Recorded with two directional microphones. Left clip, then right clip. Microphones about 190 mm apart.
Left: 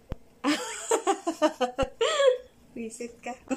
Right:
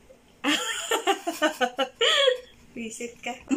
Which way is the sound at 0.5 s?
15° left (ahead or behind).